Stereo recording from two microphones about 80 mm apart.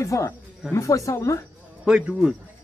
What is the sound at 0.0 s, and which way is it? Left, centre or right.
Speech, left.